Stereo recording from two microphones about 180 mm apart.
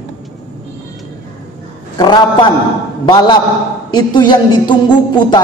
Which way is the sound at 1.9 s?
25° left (ahead or behind).